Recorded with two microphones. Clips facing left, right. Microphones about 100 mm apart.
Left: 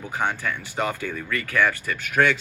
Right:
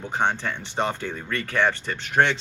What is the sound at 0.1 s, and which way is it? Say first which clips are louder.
Speech: right 1 dB; 25° right (ahead or behind).